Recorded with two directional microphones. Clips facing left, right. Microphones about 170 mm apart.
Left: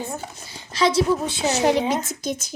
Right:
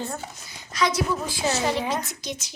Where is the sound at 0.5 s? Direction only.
30° left (ahead or behind).